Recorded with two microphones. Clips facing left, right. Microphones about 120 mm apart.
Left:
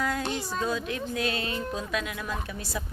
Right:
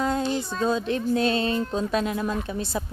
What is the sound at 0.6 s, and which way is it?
Speech, 30° right (ahead or behind).